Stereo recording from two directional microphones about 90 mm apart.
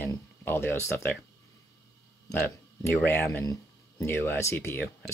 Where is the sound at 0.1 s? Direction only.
25° left (ahead or behind).